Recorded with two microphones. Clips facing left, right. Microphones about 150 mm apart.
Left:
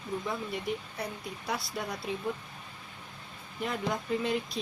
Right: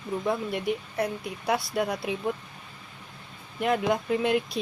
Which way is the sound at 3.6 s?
70° right (ahead or behind).